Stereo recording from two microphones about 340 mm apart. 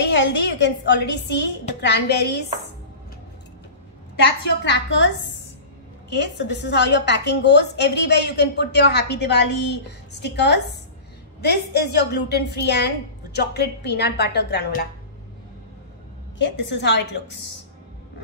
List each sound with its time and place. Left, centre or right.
0.0 s a woman's voice: left
4.6 s a woman's voice: left
16.3 s a woman's voice: left